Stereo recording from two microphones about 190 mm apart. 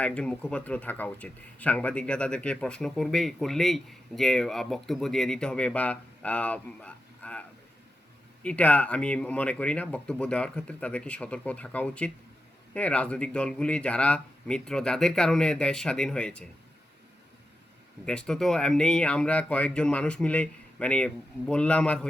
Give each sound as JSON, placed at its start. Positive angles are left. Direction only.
{"t": 0.0, "sound": "speech", "side_deg": 5}
{"t": 8.4, "sound": "speech", "side_deg": 5}
{"t": 18.0, "sound": "speech", "side_deg": 5}